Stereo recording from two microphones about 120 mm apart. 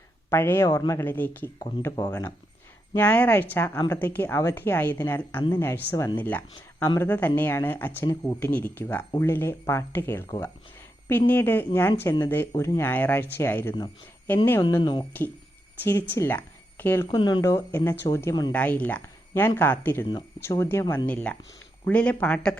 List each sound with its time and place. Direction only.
0.3 s speech: 20° left (ahead or behind)
0.7 s speech: 35° left (ahead or behind)
0.9 s speech: 15° left (ahead or behind)
1.8 s speech: 30° left (ahead or behind)
2.9 s speech: 15° left (ahead or behind)
6.8 s speech: 30° left (ahead or behind)
7.1 s speech: 15° left (ahead or behind)
14.8 s speech: 40° left (ahead or behind)
15.8 s speech: 15° left (ahead or behind)
17.1 s speech: 40° left (ahead or behind)
17.4 s speech: 20° left (ahead or behind)
18.5 s speech: 10° left (ahead or behind)